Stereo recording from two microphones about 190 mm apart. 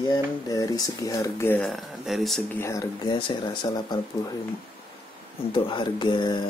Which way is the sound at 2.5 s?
15° left (ahead or behind).